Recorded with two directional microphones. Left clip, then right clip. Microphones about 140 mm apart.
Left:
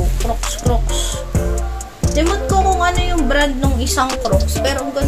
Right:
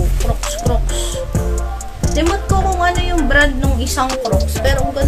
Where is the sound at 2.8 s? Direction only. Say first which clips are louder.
Right 1 dB; 20° left (ahead or behind).